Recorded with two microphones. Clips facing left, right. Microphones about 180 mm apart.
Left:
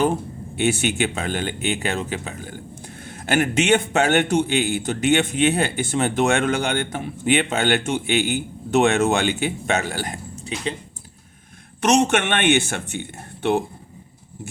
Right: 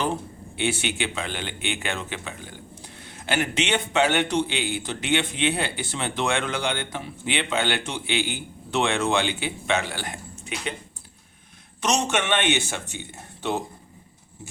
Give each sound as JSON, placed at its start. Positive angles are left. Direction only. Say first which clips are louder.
{"t": 0.5, "sound": "a man's voice", "louder": "left 6 dB", "side_deg": 45}
{"t": 11.8, "sound": "speech", "louder": "left 6 dB", "side_deg": 55}